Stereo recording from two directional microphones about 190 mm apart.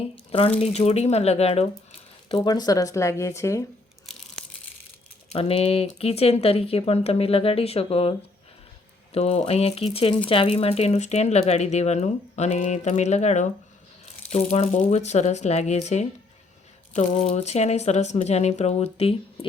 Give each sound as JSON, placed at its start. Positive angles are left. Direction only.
{"t": 0.3, "sound": "speech", "side_deg": 30}
{"t": 2.3, "sound": "speech", "side_deg": 20}
{"t": 5.3, "sound": "speech", "side_deg": 30}
{"t": 9.1, "sound": "speech", "side_deg": 35}